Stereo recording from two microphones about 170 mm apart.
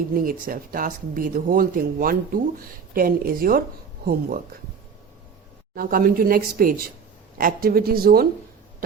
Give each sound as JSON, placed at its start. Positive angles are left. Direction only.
{"t": 0.1, "sound": "speech", "side_deg": -55}
{"t": 5.7, "sound": "speech", "side_deg": -60}